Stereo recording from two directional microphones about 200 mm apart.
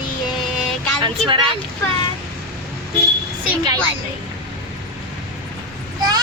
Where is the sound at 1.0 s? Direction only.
25° right (ahead or behind).